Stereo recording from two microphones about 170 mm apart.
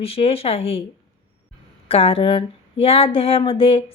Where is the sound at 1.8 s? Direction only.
35° left (ahead or behind).